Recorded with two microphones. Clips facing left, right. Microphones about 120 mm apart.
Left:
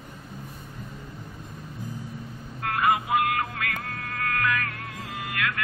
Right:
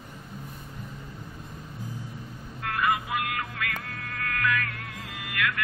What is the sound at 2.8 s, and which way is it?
Music, 30° left (ahead or behind).